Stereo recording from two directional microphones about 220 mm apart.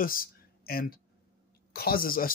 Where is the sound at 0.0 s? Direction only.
40° left (ahead or behind).